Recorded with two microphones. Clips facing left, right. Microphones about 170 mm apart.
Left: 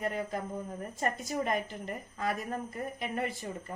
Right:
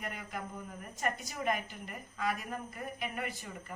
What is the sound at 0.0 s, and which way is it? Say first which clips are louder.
A woman's voice: left 8 dB; 30° left (ahead or behind).